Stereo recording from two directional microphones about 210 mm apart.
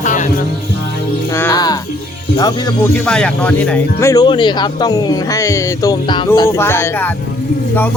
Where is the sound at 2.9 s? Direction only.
5° left (ahead or behind).